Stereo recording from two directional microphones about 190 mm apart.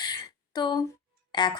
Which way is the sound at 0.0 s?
20° left (ahead or behind).